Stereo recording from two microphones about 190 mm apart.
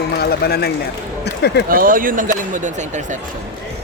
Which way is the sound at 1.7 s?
45° right (ahead or behind).